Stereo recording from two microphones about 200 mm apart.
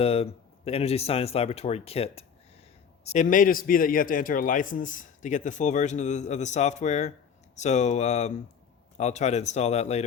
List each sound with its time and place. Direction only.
0.0 s a man's voice: 30° left (ahead or behind)